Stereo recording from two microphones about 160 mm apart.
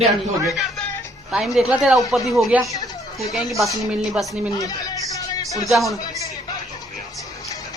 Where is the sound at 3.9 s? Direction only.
5° right (ahead or behind).